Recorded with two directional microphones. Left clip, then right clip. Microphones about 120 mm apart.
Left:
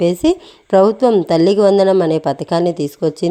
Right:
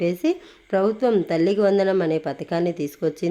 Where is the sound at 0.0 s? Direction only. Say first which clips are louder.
Left 8 dB; 50° left (ahead or behind).